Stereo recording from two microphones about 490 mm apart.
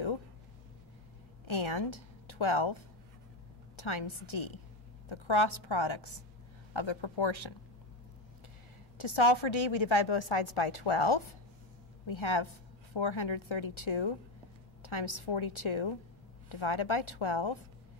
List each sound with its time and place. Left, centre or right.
1.4 s a woman's voice: left
8.9 s a woman's voice: left